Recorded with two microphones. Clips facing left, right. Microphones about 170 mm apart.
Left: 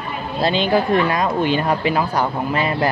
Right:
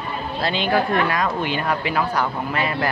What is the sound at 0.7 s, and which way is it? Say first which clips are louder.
A woman's voice: left 1 dB; 20° left (ahead or behind).